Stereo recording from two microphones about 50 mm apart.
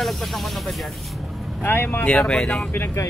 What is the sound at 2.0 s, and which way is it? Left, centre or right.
Speech, left.